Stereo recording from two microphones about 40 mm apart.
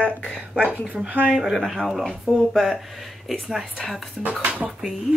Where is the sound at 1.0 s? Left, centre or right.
Right.